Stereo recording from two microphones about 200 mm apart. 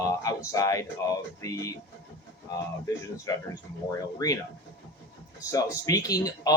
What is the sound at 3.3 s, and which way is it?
Speech, 15° left (ahead or behind).